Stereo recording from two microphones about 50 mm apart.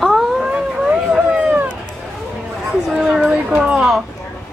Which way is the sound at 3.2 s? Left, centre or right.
Right.